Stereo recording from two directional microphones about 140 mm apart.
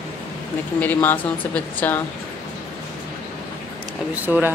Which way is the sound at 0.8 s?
10° left (ahead or behind).